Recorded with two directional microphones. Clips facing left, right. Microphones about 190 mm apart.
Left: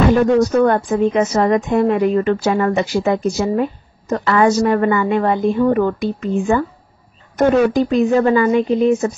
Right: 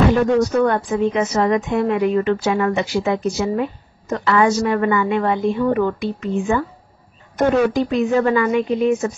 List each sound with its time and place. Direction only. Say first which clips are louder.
0.1 s a woman's voice: left 3 dB; 45° left (ahead or behind)
7.7 s a woman's voice: left 3 dB; 40° left (ahead or behind)